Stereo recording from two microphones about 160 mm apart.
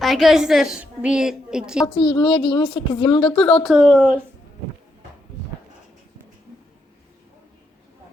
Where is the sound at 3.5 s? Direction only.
5° left (ahead or behind).